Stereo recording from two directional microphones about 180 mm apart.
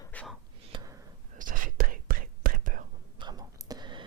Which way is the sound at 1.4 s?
50° right (ahead or behind).